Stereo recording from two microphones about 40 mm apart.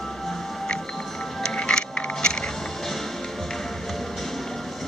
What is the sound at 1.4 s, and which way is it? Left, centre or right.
Music, left.